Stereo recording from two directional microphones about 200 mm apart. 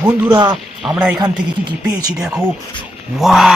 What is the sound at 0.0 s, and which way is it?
Speech, 20° right (ahead or behind).